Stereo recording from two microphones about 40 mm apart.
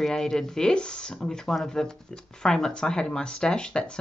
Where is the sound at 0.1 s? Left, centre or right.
Centre.